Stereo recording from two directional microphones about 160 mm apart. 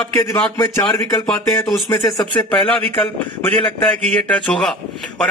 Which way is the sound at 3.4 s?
10° left (ahead or behind).